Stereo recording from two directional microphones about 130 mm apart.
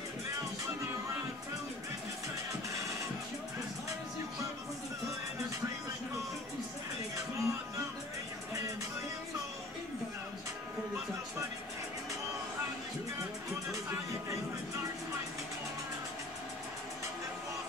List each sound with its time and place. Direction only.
7.2 s music: 25° right (ahead or behind)